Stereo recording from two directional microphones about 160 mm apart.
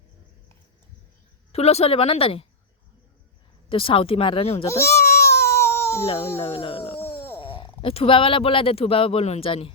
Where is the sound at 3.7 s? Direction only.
35° left (ahead or behind).